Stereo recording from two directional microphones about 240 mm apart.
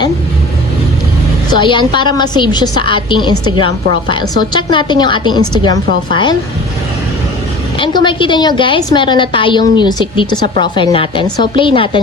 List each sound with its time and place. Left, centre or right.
1.5 s a woman's voice: centre
7.8 s a woman's voice: centre